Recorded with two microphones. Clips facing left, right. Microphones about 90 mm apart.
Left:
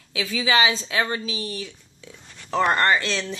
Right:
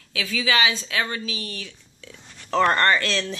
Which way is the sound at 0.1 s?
20° left (ahead or behind).